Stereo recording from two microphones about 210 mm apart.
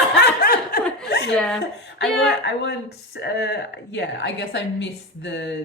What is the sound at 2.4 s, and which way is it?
A woman's voice, 55° left (ahead or behind).